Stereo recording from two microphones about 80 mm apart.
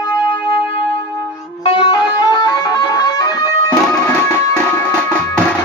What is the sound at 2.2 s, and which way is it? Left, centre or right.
Music, left.